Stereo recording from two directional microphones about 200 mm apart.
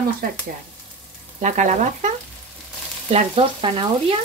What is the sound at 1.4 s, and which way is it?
Frying, 35° right (ahead or behind).